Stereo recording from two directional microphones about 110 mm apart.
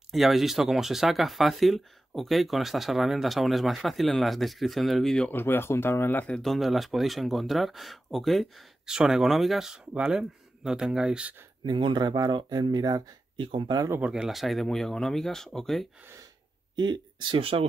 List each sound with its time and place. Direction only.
0.1 s speech: centre (ahead or behind)
5.3 s speech: 20° left (ahead or behind); by 11.3 s 5° right (ahead or behind)
11.6 s speech: 45° right (ahead or behind)
13.4 s speech: 50° right (ahead or behind)
13.7 s speech: 25° right (ahead or behind)
14.0 s speech: 5° right (ahead or behind)
16.7 s speech: 45° right (ahead or behind)